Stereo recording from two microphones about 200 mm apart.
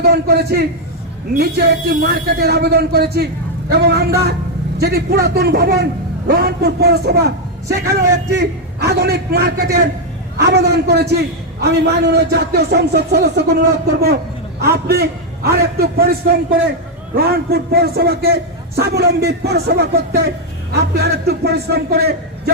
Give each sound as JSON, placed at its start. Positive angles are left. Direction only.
{"t": 0.0, "sound": "a man's voice", "side_deg": -55}
{"t": 14.6, "sound": "a man's voice", "side_deg": -50}